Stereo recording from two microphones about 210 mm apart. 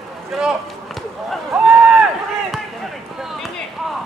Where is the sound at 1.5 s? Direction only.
5° right (ahead or behind).